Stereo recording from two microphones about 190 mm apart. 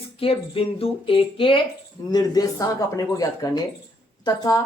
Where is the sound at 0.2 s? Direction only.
30° left (ahead or behind).